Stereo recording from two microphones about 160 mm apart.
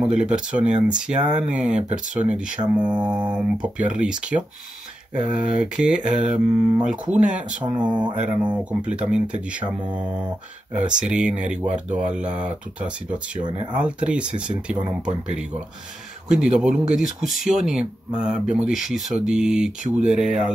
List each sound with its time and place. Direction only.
0.0 s speech: 5° right (ahead or behind)
13.4 s speech: 30° right (ahead or behind)
13.7 s speech: 5° right (ahead or behind)